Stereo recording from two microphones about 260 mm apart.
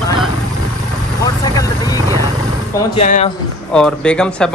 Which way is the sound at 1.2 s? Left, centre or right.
Centre.